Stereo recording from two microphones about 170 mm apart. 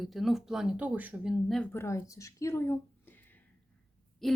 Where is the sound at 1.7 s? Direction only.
15° left (ahead or behind).